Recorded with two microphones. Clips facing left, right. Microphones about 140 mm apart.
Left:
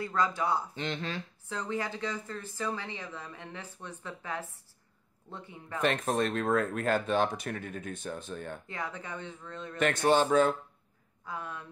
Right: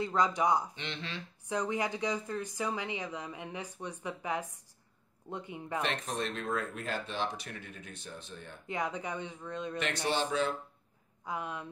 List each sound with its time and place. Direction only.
0.0 s speech: 20° right (ahead or behind)
0.7 s speech: 45° left (ahead or behind)
1.5 s speech: 15° right (ahead or behind)
5.8 s speech: 50° left (ahead or behind)
8.6 s speech: 15° right (ahead or behind)
9.8 s speech: 50° left (ahead or behind)
11.2 s speech: 15° right (ahead or behind)